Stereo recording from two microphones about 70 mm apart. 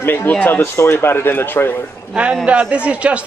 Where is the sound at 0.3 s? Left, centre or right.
Left.